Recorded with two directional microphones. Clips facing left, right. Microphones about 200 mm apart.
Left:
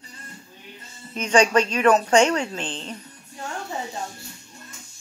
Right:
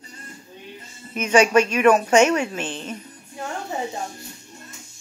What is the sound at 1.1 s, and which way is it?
Speech, 10° right (ahead or behind).